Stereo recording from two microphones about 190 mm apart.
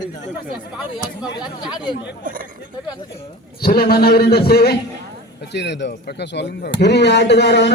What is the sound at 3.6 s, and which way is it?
A man's voice, 55° left (ahead or behind).